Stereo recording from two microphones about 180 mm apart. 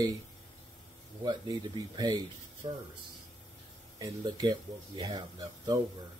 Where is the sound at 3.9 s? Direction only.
20° right (ahead or behind).